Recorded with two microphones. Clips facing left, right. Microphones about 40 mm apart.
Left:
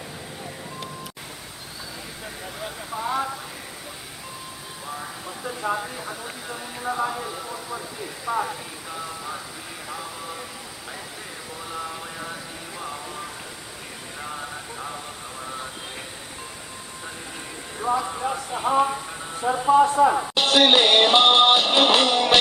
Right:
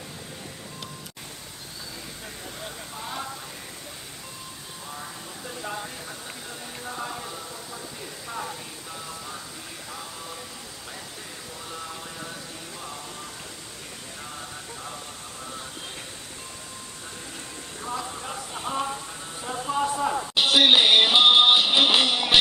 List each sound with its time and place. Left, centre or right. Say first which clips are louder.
3.0 s a sound: left 9 dB; centre
5.4 s a sound: left 7 dB; centre
8.4 s music: left 7 dB; centre
11.7 s vehicle: left 5 dB; centre
14.2 s vehicle: left 7 dB; centre
17.7 s speech: left 9 dB; centre
20.3 s music: left 1 dB; centre